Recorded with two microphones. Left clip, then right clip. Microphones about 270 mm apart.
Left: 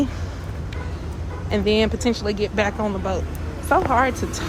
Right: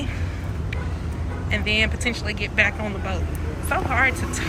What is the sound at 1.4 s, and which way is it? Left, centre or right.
Speech, centre.